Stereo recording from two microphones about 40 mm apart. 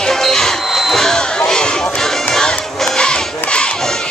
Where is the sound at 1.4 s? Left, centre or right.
Centre.